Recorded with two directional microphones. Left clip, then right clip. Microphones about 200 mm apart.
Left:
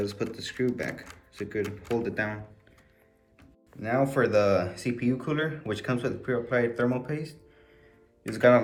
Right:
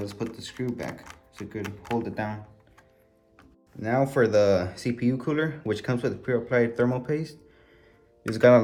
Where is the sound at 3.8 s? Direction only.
50° right (ahead or behind).